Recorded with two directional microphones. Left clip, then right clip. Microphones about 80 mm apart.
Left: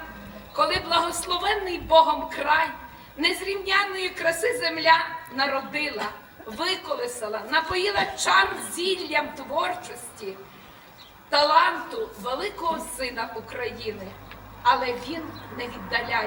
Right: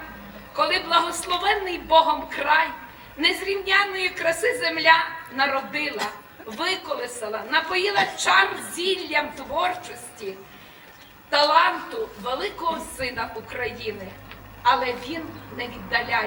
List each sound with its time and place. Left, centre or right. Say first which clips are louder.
0.5 s a woman's voice: right 2 dB; centre
6.0 s chuckle: right 2 dB; right
6.6 s a woman's voice: right 1 dB; centre
11.3 s a woman's voice: right 1 dB; centre